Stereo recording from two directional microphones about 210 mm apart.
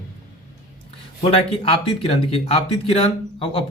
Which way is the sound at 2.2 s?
25° left (ahead or behind).